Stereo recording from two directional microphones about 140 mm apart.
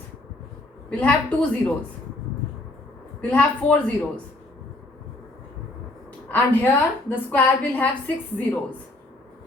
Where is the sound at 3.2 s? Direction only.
10° left (ahead or behind).